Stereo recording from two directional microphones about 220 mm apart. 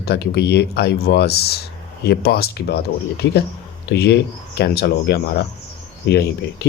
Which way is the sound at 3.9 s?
50° left (ahead or behind).